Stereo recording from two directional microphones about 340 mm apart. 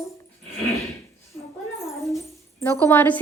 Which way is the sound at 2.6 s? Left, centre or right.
Centre.